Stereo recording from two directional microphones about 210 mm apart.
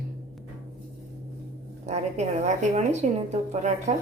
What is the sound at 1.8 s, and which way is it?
A woman's voice, 30° right (ahead or behind).